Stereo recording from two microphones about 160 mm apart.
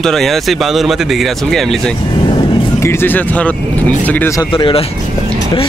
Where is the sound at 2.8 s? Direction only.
15° left (ahead or behind).